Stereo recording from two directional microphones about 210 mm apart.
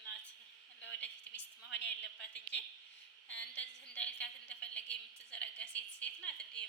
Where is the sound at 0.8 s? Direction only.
55° left (ahead or behind).